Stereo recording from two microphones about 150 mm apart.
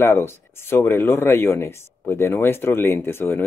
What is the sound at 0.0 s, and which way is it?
Speech, 15° left (ahead or behind).